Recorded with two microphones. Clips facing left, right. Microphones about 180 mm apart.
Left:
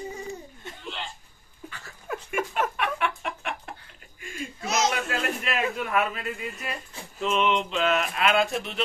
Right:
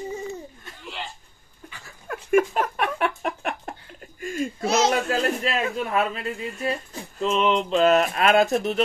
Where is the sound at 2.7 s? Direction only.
40° right (ahead or behind).